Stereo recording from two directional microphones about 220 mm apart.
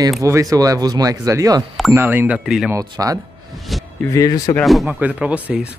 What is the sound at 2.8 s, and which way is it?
Speech, 15° right (ahead or behind).